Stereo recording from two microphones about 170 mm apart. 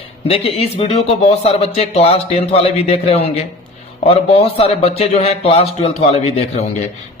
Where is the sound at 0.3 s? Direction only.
35° left (ahead or behind).